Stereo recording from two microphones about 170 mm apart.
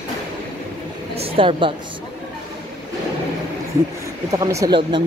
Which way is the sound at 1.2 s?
35° right (ahead or behind).